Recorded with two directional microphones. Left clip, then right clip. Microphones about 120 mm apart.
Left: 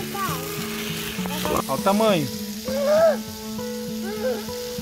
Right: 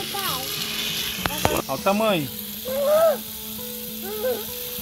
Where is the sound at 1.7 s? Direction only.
35° left (ahead or behind).